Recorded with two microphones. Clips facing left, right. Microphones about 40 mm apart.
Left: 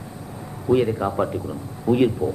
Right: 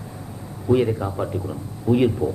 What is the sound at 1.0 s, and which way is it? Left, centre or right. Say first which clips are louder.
Speech: left 4 dB; left.